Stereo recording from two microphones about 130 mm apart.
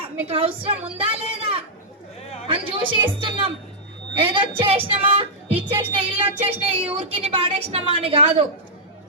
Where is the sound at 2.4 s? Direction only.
40° right (ahead or behind).